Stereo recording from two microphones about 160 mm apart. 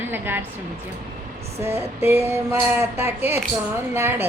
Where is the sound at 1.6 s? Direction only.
15° right (ahead or behind).